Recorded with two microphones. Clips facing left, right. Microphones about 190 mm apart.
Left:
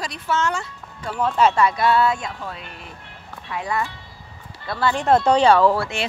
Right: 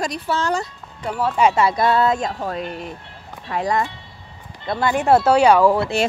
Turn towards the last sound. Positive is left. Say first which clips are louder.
# right 2 dB
turn(degrees=-10)  # may be behind; listen again after turning